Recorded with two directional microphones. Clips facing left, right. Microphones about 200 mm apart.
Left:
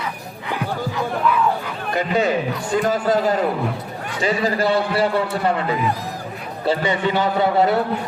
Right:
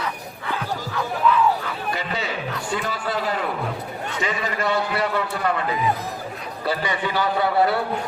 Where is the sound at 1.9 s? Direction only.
50° left (ahead or behind).